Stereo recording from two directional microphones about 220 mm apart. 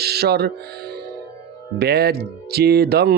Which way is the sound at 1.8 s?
45° right (ahead or behind).